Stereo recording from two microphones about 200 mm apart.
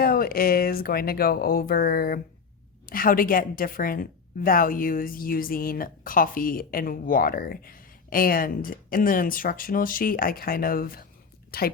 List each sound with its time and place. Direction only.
0.0 s a woman's voice: 45° left (ahead or behind)